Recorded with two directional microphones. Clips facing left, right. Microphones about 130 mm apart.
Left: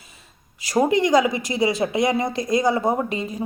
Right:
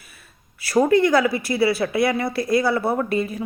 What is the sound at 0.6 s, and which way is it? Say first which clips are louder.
A woman's voice: right 2 dB; 15° left (ahead or behind).